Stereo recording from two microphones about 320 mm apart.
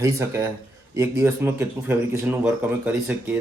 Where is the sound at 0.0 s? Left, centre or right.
Centre.